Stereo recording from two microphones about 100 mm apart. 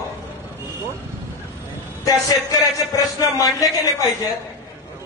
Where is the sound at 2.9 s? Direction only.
35° left (ahead or behind).